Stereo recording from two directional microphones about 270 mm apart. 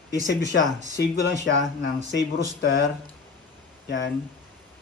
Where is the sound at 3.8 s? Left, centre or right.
Left.